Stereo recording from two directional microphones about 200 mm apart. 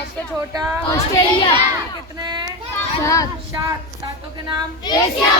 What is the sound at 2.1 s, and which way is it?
Child singing, 20° right (ahead or behind).